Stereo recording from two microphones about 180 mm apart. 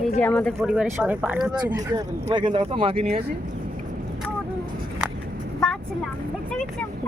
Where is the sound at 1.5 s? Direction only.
25° right (ahead or behind).